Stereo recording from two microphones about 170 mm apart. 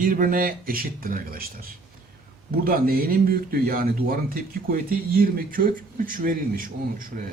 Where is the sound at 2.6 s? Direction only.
60° right (ahead or behind).